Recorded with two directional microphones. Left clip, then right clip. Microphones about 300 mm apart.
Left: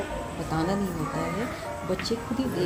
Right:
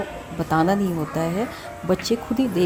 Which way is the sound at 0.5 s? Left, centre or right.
Right.